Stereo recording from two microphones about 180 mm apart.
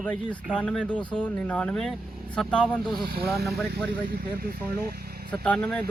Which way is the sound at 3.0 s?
60° right (ahead or behind).